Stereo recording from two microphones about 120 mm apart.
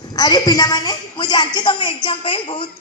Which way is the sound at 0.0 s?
35° left (ahead or behind).